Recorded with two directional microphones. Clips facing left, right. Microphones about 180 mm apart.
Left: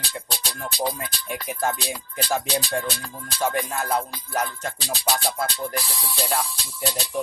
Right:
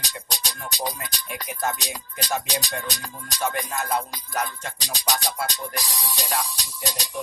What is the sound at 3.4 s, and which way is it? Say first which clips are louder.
Music: left 3 dB; 35° left (ahead or behind).